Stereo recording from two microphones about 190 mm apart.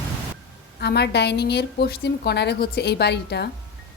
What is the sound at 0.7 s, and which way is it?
A woman's voice, 60° left (ahead or behind).